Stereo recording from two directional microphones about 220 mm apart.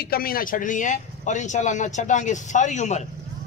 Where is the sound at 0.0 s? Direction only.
45° left (ahead or behind).